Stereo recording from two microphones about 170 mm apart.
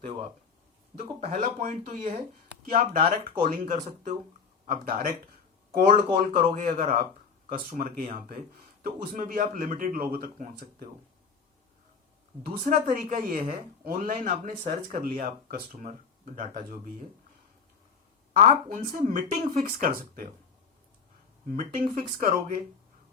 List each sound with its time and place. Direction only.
1.3 s speech: 55° right (ahead or behind)
12.4 s speech: 60° right (ahead or behind)
18.3 s speech: 50° right (ahead or behind)
21.4 s speech: 55° right (ahead or behind)